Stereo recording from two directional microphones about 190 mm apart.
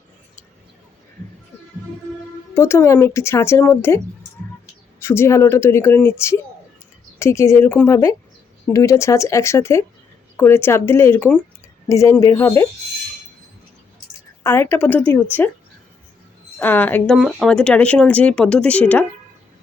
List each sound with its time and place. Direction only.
2.6 s speech: 15° left (ahead or behind)
14.4 s speech: 10° left (ahead or behind)
16.6 s speech: 10° left (ahead or behind)